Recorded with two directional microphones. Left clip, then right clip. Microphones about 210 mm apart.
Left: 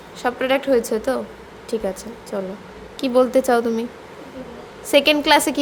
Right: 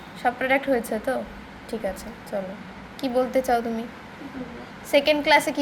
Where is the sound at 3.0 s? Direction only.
45° left (ahead or behind).